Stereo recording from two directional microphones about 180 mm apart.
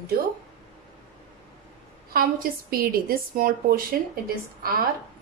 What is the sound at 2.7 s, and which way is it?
A woman's voice, 55° right (ahead or behind).